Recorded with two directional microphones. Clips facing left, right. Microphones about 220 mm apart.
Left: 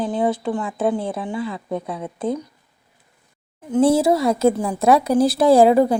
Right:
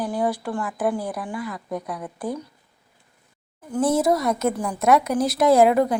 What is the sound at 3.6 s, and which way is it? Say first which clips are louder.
A woman's voice: left 5 dB; 25° left (ahead or behind).